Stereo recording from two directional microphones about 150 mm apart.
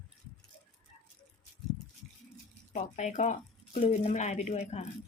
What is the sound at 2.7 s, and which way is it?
Speech, 55° left (ahead or behind).